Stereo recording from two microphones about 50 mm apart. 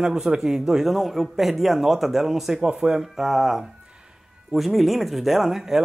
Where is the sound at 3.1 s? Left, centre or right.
Centre.